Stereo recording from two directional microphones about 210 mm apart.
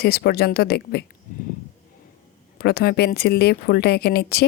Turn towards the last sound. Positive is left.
turn(degrees=50)  # may be behind; listen again after turning